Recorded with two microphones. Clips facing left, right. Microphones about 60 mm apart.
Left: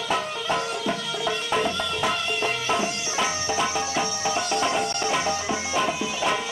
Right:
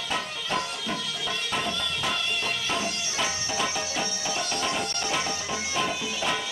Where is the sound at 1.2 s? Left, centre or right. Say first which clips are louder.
Left 7 dB; left.